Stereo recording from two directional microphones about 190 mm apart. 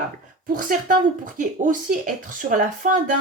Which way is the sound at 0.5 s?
45° right (ahead or behind).